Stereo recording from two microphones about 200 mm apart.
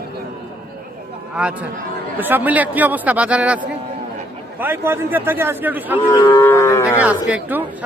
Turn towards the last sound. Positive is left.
turn(degrees=-5)  # may be behind; listen again after turning